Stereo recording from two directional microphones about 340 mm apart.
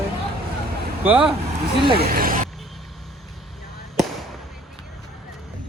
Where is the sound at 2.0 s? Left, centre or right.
Right.